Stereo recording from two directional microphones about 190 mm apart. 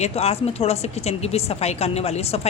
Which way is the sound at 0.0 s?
35° left (ahead or behind).